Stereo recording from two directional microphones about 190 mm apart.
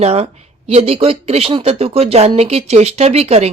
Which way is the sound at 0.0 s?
35° right (ahead or behind).